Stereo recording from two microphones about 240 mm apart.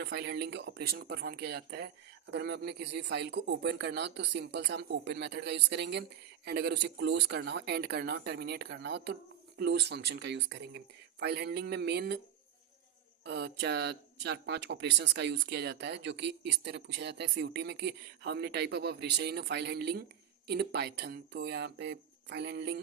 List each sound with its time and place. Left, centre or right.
0.0 s speech: right
13.2 s speech: right